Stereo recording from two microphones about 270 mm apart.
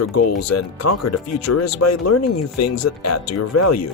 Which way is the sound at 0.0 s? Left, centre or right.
Left.